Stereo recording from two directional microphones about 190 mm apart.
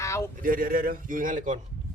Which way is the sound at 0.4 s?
50° right (ahead or behind).